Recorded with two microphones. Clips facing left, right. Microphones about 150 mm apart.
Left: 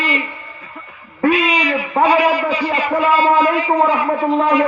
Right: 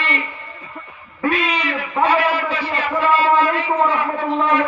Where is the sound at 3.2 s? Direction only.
35° left (ahead or behind).